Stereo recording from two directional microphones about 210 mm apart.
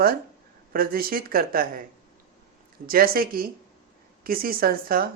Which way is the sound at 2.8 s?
45° right (ahead or behind).